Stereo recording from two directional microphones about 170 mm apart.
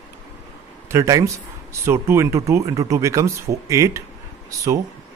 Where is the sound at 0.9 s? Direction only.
20° right (ahead or behind).